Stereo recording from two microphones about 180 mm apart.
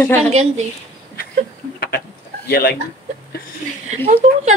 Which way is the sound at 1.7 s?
60° left (ahead or behind).